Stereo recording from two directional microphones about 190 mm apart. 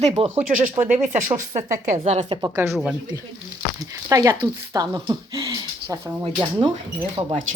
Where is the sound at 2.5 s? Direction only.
15° right (ahead or behind).